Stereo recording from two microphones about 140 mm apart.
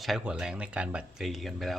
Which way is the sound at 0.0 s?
5° right (ahead or behind).